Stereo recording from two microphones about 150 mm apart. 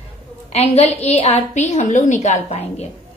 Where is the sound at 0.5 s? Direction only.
45° left (ahead or behind).